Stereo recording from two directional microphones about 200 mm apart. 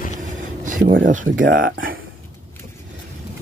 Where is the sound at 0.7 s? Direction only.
45° right (ahead or behind).